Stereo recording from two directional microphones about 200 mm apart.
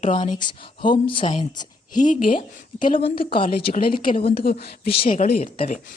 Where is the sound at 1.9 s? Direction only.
40° left (ahead or behind).